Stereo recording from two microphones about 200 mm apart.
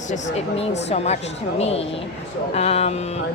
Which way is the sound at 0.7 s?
35° left (ahead or behind).